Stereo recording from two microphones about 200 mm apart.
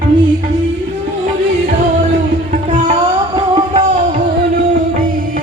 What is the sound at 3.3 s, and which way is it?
Music, 25° right (ahead or behind).